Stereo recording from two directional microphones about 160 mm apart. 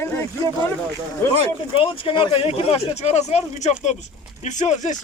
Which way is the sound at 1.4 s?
35° left (ahead or behind).